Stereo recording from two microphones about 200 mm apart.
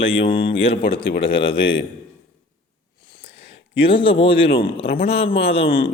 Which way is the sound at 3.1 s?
25° left (ahead or behind).